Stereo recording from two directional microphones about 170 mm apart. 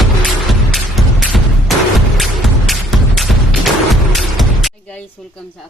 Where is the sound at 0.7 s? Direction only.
Centre (ahead or behind).